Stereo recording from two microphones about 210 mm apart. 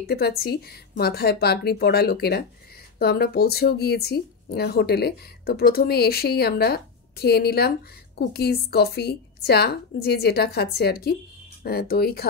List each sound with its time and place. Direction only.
0.0 s speech: 45° left (ahead or behind)